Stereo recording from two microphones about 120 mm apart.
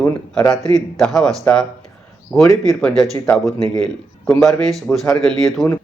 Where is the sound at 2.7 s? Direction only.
5° left (ahead or behind).